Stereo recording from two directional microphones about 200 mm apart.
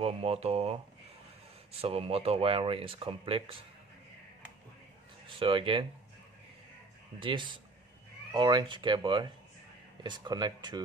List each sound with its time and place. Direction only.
0.0 s speech: 30° right (ahead or behind)
5.4 s speech: 25° right (ahead or behind)
7.2 s speech: 25° right (ahead or behind)